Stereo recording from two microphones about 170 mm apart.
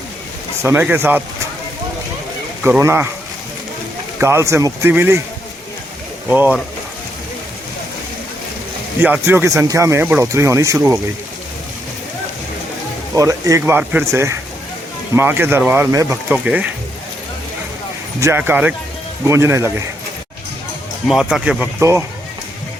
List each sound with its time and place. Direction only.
0.6 s speech: 10° right (ahead or behind)
2.6 s speech: 15° right (ahead or behind)
4.2 s speech: 15° right (ahead or behind)
6.2 s speech: 10° right (ahead or behind)
9.0 s speech: 10° right (ahead or behind)
13.1 s speech: 20° right (ahead or behind)
16.3 s speech: 5° right (ahead or behind)
18.2 s speech: 15° right (ahead or behind)
21.1 s speech: centre (ahead or behind)